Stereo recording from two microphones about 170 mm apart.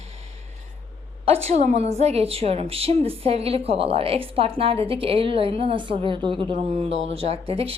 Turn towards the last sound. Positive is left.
turn(degrees=-35)  # may be behind; listen again after turning